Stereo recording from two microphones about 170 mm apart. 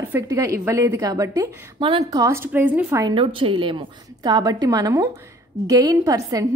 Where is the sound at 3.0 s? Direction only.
30° right (ahead or behind).